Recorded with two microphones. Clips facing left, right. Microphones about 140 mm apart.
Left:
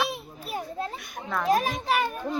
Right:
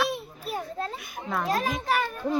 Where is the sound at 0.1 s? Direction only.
5° left (ahead or behind).